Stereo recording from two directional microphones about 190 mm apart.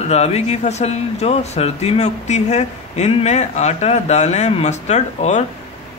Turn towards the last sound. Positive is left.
turn(degrees=35)  # may be behind; listen again after turning